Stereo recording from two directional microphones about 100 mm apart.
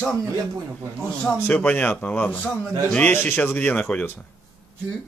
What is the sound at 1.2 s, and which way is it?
A man's voice, 15° left (ahead or behind).